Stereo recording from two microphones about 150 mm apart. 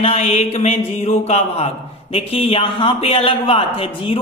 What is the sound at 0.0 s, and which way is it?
A man's voice, 45° left (ahead or behind).